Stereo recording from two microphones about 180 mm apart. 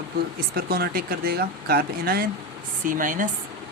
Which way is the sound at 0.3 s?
55° right (ahead or behind).